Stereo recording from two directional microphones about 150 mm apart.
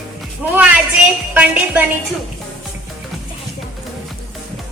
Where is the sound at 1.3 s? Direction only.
10° right (ahead or behind).